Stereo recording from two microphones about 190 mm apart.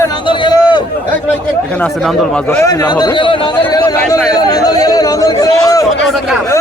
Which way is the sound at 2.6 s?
20° left (ahead or behind).